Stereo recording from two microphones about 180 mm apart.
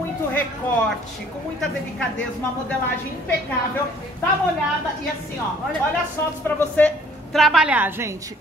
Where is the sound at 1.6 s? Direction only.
5° left (ahead or behind).